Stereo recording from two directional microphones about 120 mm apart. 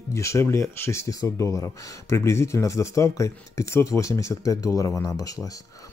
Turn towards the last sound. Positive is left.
turn(degrees=30)  # may be behind; listen again after turning